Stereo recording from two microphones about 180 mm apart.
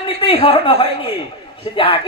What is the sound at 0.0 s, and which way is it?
A man's voice, 30° left (ahead or behind).